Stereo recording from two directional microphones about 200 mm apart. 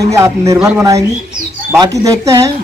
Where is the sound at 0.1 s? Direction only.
15° right (ahead or behind).